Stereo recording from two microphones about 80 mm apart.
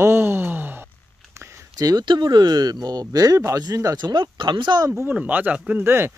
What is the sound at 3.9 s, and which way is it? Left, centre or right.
Speech, right.